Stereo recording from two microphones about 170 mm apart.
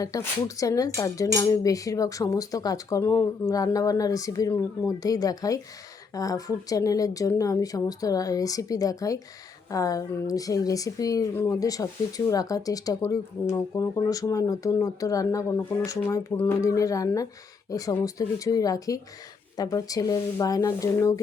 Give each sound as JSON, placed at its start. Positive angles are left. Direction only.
{"t": 0.0, "sound": "speech", "side_deg": 20}